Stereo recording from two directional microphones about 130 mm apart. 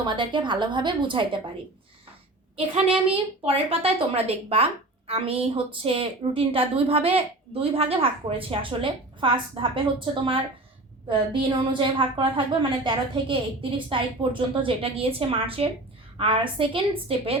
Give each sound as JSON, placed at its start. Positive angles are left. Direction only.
{"t": 0.0, "sound": "a woman's voice", "side_deg": -35}
{"t": 2.6, "sound": "a woman's voice", "side_deg": -45}